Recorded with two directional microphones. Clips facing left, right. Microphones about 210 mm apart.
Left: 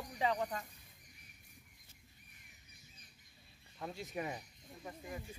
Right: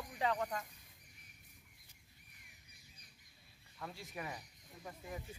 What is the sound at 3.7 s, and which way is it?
Speech, 20° left (ahead or behind).